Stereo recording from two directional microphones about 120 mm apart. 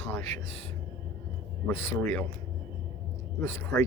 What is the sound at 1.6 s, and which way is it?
Speech, 20° left (ahead or behind).